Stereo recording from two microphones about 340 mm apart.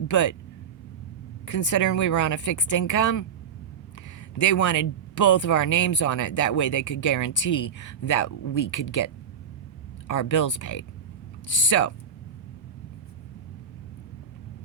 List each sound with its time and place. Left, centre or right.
0.1 s speech: left
1.5 s speech: left
4.4 s speech: left
10.1 s speech: left